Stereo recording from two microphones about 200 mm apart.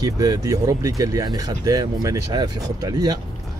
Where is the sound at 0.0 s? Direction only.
15° right (ahead or behind).